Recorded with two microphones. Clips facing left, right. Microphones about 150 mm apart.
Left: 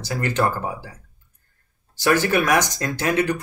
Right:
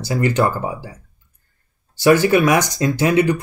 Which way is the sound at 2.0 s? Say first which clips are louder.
Right 6 dB; 15° right (ahead or behind).